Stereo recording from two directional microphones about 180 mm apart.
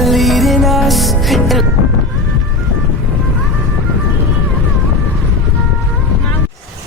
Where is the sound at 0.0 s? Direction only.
Centre (ahead or behind).